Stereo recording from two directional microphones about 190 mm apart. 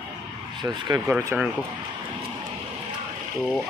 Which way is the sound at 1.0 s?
5° right (ahead or behind).